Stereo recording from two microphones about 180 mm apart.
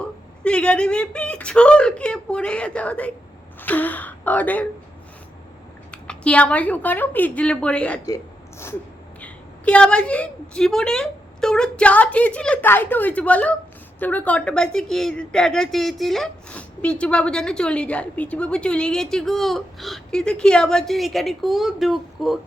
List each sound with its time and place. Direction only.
0.4 s a woman's voice: 5° left (ahead or behind)
5.9 s a woman's voice: 5° left (ahead or behind)
8.0 s a sound: 15° left (ahead or behind)
9.2 s a woman's voice: 5° left (ahead or behind)